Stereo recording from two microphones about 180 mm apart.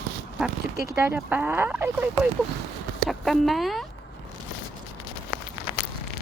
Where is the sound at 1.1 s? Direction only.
10° right (ahead or behind).